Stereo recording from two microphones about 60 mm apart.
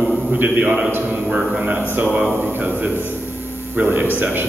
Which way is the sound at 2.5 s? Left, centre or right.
Right.